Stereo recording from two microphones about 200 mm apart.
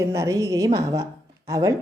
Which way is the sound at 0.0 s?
15° right (ahead or behind).